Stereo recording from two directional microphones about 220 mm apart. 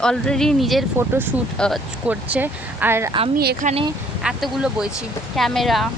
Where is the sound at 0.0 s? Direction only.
5° left (ahead or behind).